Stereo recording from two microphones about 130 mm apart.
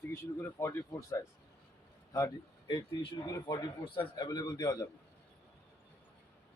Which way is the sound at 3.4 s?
40° left (ahead or behind).